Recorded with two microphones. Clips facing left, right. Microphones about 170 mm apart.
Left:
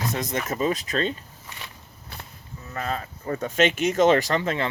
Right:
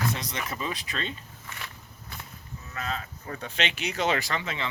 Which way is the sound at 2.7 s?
40° left (ahead or behind).